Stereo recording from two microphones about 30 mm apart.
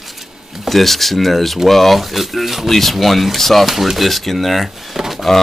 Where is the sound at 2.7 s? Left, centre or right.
Centre.